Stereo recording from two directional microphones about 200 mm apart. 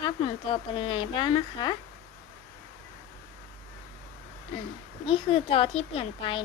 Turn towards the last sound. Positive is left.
turn(degrees=25)  # may be behind; listen again after turning